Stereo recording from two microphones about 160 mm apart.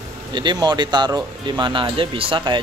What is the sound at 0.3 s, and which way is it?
Speech, 30° right (ahead or behind).